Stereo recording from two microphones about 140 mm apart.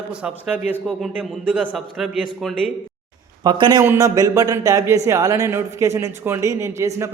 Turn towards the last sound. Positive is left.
turn(degrees=-20)  # may be behind; listen again after turning